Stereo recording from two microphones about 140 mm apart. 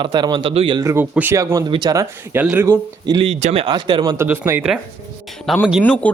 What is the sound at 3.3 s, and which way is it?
Speech, 55° right (ahead or behind).